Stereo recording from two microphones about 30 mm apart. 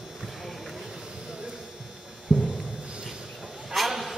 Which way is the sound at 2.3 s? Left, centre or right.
Centre.